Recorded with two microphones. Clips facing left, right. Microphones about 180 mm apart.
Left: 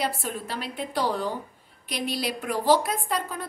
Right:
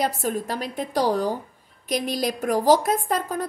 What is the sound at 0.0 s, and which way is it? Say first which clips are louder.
A woman's voice: right 5 dB; 45° right (ahead or behind).